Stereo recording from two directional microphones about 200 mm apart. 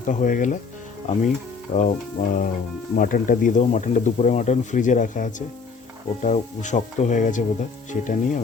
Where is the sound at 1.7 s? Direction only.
35° left (ahead or behind).